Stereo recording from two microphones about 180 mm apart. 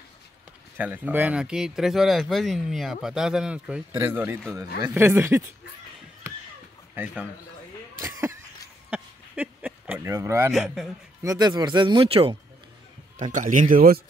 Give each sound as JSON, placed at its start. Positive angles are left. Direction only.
{"t": 0.7, "sound": "speech", "side_deg": -10}
{"t": 8.9, "sound": "a sound", "side_deg": -5}
{"t": 10.5, "sound": "speech", "side_deg": 0}
{"t": 11.2, "sound": "speech", "side_deg": -20}
{"t": 13.2, "sound": "speech", "side_deg": -45}